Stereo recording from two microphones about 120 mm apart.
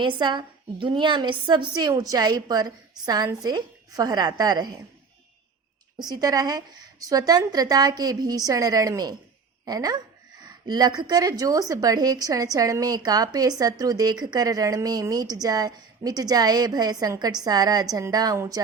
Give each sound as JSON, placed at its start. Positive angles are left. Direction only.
{"t": 0.0, "sound": "a woman's voice", "side_deg": -40}
{"t": 6.0, "sound": "a woman's voice", "side_deg": -30}